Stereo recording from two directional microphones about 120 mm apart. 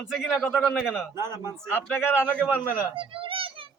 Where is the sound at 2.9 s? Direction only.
50° right (ahead or behind).